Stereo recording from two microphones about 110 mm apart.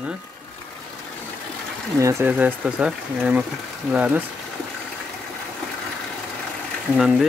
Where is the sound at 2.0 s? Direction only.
30° right (ahead or behind).